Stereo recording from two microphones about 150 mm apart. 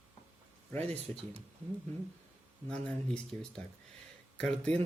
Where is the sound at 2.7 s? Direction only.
5° left (ahead or behind).